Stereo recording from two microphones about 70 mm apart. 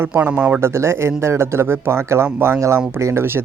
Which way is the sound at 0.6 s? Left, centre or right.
Right.